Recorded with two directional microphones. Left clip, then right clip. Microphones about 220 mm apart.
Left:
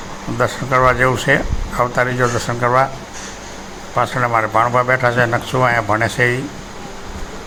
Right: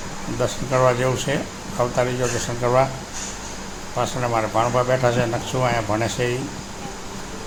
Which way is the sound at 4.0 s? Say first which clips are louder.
Left 6 dB; 15° left (ahead or behind).